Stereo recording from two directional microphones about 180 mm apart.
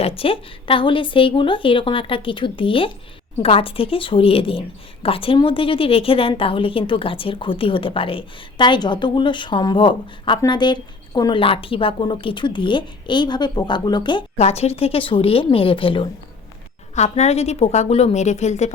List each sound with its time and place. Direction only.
0.0 s a woman's voice: 30° left (ahead or behind)